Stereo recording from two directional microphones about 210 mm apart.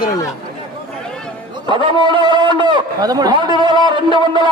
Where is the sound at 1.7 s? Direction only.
20° right (ahead or behind).